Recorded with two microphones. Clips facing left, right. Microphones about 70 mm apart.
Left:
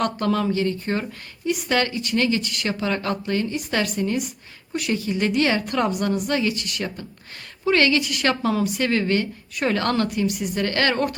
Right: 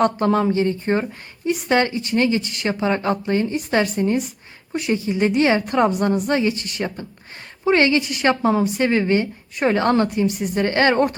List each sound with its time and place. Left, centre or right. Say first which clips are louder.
0.0 s a woman's voice: right 5 dB; right